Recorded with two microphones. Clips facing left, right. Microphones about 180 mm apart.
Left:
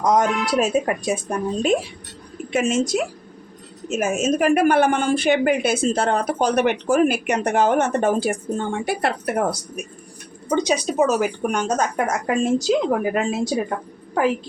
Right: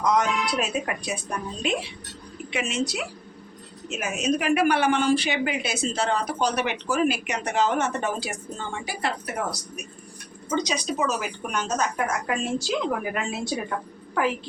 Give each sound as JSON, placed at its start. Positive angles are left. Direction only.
{"t": 0.0, "sound": "speech", "side_deg": 45}
{"t": 11.9, "sound": "speech", "side_deg": 40}